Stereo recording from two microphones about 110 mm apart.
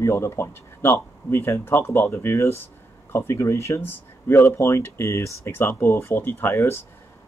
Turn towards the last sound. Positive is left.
turn(degrees=20)  # may be behind; listen again after turning